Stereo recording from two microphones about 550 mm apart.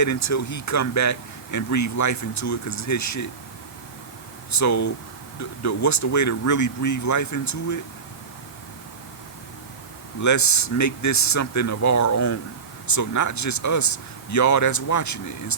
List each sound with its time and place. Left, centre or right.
0.0 s speech: left
4.5 s speech: left
10.2 s speech: left